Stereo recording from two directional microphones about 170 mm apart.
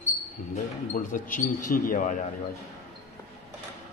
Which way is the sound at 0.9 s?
55° left (ahead or behind).